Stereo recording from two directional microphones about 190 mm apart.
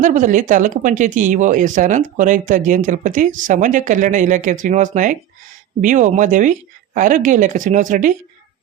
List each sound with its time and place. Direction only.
0.0 s speech: 40° right (ahead or behind)